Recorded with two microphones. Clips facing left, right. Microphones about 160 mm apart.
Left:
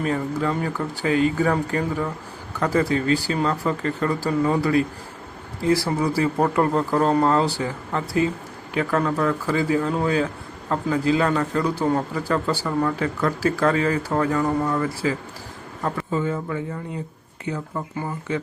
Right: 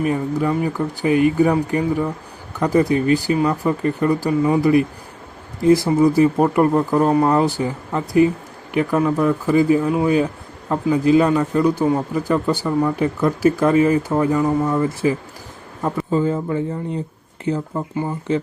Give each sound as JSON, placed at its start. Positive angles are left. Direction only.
{"t": 0.0, "sound": "speech", "side_deg": -15}
{"t": 16.1, "sound": "speech", "side_deg": -35}